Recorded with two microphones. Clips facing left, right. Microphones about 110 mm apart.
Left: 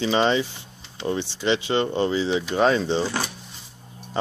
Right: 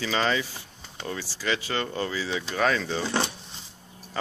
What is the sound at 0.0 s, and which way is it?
Speech, 25° left (ahead or behind).